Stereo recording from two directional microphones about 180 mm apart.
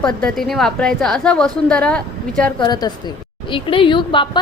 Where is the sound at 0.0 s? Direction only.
5° left (ahead or behind).